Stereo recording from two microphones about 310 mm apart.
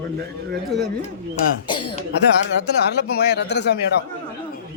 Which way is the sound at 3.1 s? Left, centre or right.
Left.